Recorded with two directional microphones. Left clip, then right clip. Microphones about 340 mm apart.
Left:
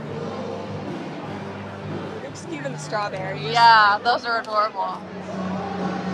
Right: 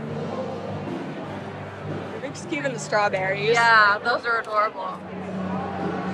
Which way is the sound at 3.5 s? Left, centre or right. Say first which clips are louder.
Left 3 dB; centre.